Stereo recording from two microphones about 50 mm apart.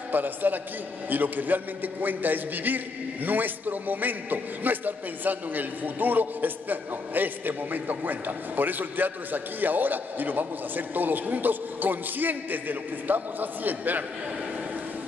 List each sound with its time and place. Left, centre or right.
0.1 s a man's voice: right